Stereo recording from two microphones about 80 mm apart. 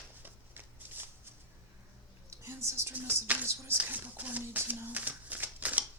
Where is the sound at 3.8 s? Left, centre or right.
Right.